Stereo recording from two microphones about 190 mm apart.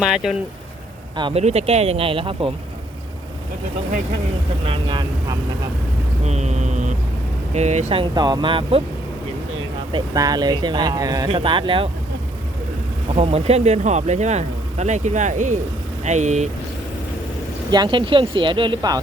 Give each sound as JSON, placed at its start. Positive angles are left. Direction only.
{"t": 0.0, "sound": "speech", "side_deg": 0}
{"t": 1.1, "sound": "speech", "side_deg": -30}
{"t": 4.6, "sound": "speech", "side_deg": -25}
{"t": 6.2, "sound": "vehicle", "side_deg": -35}
{"t": 7.5, "sound": "speech", "side_deg": -35}
{"t": 8.1, "sound": "speech", "side_deg": -20}
{"t": 9.9, "sound": "speech", "side_deg": -20}
{"t": 13.1, "sound": "speech", "side_deg": -35}
{"t": 17.7, "sound": "speech", "side_deg": -25}